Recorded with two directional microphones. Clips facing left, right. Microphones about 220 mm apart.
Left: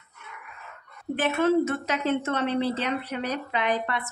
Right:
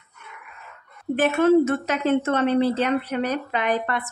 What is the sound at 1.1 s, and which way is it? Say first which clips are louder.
A woman's voice: right 5 dB; 50° right (ahead or behind).